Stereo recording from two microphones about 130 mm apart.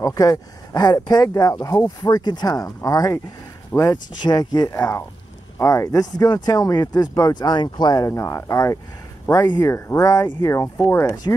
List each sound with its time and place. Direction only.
0.0 s speech: 25° left (ahead or behind)
8.1 s speech: 20° left (ahead or behind)